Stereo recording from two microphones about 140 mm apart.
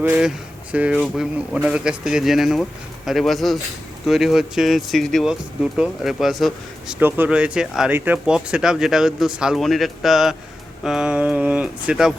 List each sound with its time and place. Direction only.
0.0 s speech: 10° right (ahead or behind)